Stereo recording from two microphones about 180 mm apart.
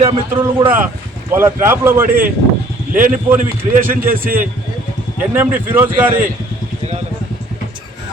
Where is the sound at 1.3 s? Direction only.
15° right (ahead or behind).